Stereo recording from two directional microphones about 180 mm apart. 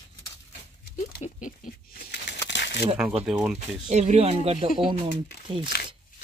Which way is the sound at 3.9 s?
40° right (ahead or behind).